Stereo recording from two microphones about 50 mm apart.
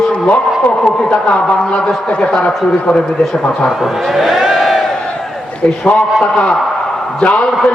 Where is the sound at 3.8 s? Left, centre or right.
Centre.